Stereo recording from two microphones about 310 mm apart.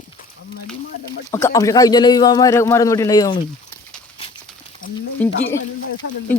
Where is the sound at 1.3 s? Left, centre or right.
Centre.